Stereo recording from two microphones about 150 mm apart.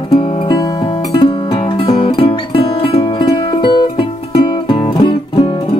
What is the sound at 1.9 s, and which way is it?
Music, 35° left (ahead or behind).